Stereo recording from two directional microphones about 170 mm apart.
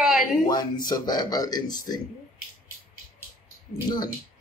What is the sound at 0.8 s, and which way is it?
Speech, 25° left (ahead or behind).